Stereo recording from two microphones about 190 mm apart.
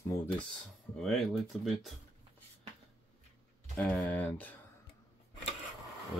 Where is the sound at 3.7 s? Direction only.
10° left (ahead or behind).